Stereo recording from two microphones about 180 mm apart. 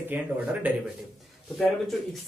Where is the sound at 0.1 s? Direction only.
10° right (ahead or behind).